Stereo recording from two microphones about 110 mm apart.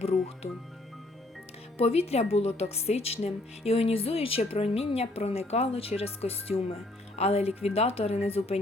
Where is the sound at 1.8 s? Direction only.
65° left (ahead or behind).